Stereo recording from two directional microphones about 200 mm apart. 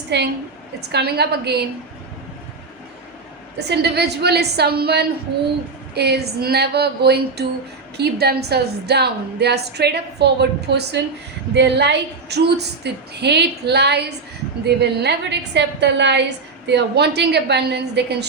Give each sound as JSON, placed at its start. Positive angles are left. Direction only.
{"t": 0.1, "sound": "a woman's voice", "side_deg": -60}
{"t": 3.7, "sound": "a woman's voice", "side_deg": -55}